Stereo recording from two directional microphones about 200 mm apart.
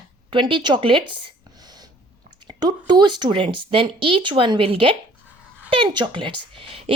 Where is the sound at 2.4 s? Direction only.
20° right (ahead or behind).